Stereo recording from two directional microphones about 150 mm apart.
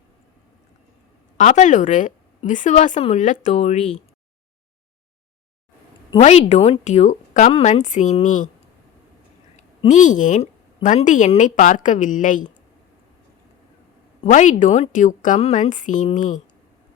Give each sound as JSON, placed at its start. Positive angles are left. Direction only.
{"t": 1.4, "sound": "a woman's voice", "side_deg": 55}
{"t": 6.1, "sound": "a woman's voice", "side_deg": 45}
{"t": 9.8, "sound": "a woman's voice", "side_deg": 55}
{"t": 14.3, "sound": "a woman's voice", "side_deg": 55}